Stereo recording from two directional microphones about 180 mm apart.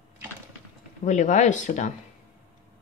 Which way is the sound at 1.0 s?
40° left (ahead or behind).